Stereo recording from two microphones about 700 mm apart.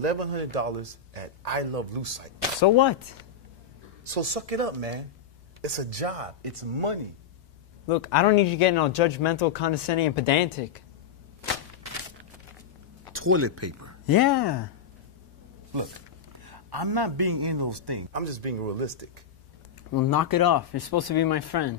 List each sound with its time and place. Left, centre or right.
0.0 s a man's voice: right
2.6 s speech: left
4.0 s a man's voice: right
7.9 s speech: left
13.1 s speech: centre
14.0 s speech: left
16.3 s a man's voice: right
18.1 s a man's voice: right
19.9 s speech: left